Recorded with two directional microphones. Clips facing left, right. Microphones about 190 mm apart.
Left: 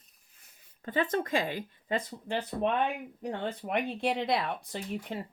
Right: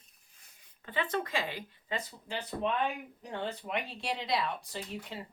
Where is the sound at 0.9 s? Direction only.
45° left (ahead or behind).